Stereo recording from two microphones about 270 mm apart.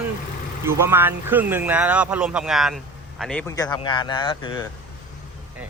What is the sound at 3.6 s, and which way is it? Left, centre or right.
Speech, centre.